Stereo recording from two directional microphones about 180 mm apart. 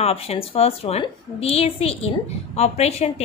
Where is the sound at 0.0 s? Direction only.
35° left (ahead or behind).